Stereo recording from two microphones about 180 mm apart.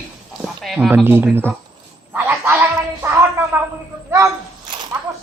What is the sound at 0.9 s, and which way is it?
Speech, 10° right (ahead or behind).